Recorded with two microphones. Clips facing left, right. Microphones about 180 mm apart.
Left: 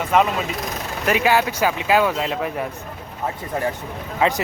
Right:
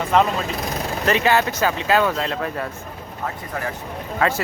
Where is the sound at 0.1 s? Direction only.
5° left (ahead or behind).